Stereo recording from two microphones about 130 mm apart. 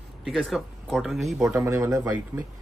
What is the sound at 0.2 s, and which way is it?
A man's voice, centre (ahead or behind).